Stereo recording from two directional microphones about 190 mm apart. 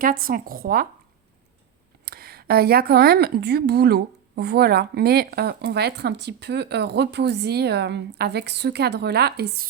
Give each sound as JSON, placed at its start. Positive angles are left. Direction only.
{"t": 0.0, "sound": "speech", "side_deg": -50}
{"t": 2.0, "sound": "a woman's voice", "side_deg": -55}